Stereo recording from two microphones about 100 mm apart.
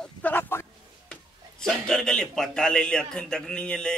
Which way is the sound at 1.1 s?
5° left (ahead or behind).